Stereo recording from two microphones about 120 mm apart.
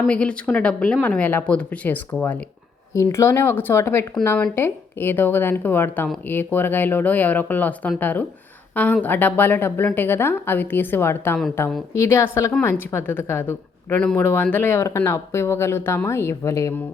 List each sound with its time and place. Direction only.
0.1 s a woman's voice: 10° left (ahead or behind)
2.9 s a woman's voice: 25° left (ahead or behind)